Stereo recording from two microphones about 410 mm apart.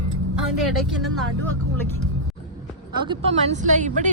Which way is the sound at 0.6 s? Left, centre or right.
Centre.